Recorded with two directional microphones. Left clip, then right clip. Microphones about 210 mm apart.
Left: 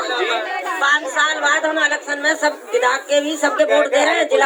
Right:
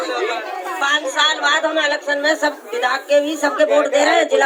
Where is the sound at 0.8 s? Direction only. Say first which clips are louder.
Even; 40° right (ahead or behind).